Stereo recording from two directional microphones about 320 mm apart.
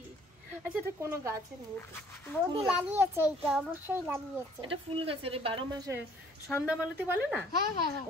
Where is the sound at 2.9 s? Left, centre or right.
Centre.